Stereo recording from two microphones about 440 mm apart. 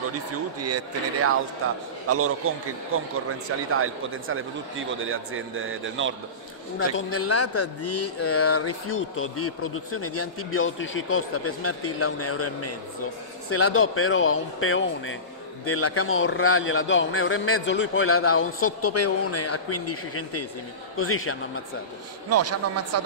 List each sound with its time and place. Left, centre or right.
0.1 s a man's voice: right
6.8 s a man's voice: left
22.3 s speech: right